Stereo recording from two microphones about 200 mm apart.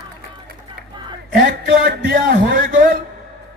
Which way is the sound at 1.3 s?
50° right (ahead or behind).